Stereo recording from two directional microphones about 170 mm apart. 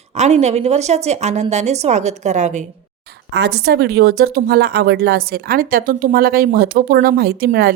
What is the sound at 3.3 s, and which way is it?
Speech, 75° right (ahead or behind).